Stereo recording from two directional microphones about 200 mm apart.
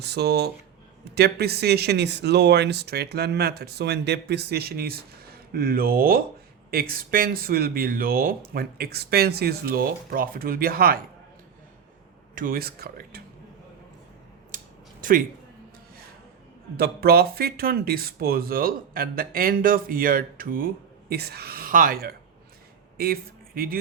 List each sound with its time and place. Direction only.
0.0 s speech: 55° right (ahead or behind)
12.3 s speech: 45° right (ahead or behind)
16.7 s speech: 50° right (ahead or behind)